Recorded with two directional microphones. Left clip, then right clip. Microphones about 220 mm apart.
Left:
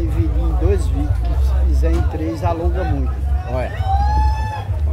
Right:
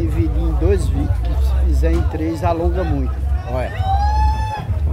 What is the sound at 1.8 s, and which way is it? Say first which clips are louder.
A man's voice: right 2 dB; 15° right (ahead or behind).